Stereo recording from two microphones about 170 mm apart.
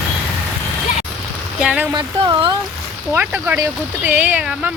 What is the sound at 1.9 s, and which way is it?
Speech, 25° right (ahead or behind).